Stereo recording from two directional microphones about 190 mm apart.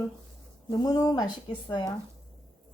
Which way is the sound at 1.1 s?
20° left (ahead or behind).